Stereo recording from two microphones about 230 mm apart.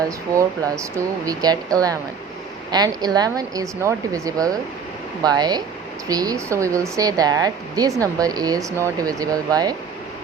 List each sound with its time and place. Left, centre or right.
0.3 s speech: centre